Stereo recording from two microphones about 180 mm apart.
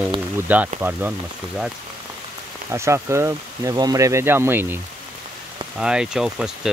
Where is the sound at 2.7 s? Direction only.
15° right (ahead or behind).